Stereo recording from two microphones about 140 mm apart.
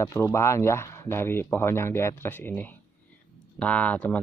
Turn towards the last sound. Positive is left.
turn(degrees=10)  # may be behind; listen again after turning